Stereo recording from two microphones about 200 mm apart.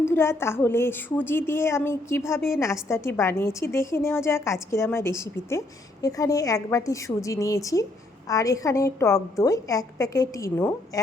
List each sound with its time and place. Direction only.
0.0 s a woman's voice: 15° left (ahead or behind)